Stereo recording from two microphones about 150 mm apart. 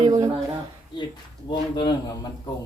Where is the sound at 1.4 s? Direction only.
30° left (ahead or behind).